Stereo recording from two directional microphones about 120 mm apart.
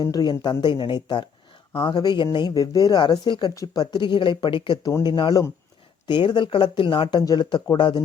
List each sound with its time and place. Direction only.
0.0 s speech: 35° left (ahead or behind)
7.2 s speech: 35° left (ahead or behind)